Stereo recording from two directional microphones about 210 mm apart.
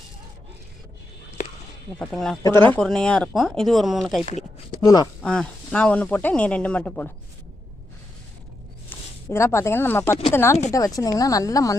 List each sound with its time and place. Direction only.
2.0 s speech: centre (ahead or behind)
8.9 s speech: 10° left (ahead or behind)